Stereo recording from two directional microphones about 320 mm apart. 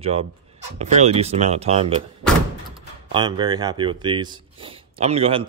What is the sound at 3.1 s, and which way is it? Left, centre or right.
Speech, centre.